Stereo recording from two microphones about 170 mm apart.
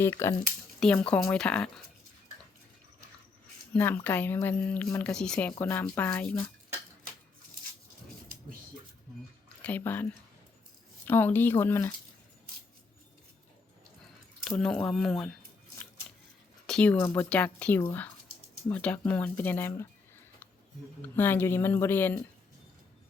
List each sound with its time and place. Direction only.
0.0 s speech: 15° left (ahead or behind)
3.7 s speech: 10° left (ahead or behind)
9.6 s speech: 10° left (ahead or behind)
14.4 s speech: 5° left (ahead or behind)
16.6 s speech: 5° left (ahead or behind)
21.0 s speech: 10° left (ahead or behind)